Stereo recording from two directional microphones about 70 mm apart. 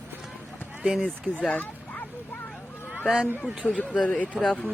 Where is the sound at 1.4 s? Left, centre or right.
Left.